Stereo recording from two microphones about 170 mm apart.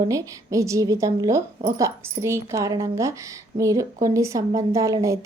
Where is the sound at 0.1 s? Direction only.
20° right (ahead or behind).